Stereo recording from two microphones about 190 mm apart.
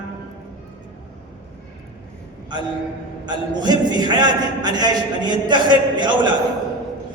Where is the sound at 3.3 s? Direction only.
20° right (ahead or behind).